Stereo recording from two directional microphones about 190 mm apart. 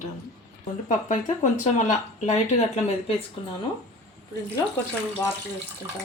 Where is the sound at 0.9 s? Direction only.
40° left (ahead or behind).